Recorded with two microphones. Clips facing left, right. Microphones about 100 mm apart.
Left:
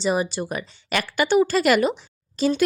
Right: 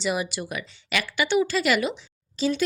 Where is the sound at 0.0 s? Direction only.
35° left (ahead or behind).